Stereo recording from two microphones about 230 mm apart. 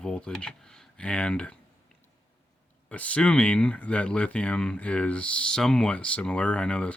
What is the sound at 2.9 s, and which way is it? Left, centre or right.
Speech, centre.